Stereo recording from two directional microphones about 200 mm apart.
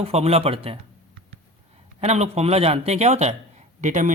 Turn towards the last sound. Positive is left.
turn(degrees=-40)  # may be behind; listen again after turning